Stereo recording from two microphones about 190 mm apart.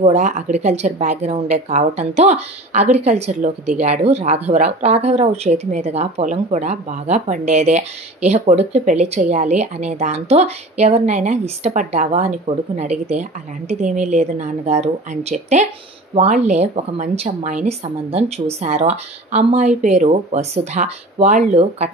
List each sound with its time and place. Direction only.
0.0 s a woman's voice: 35° right (ahead or behind)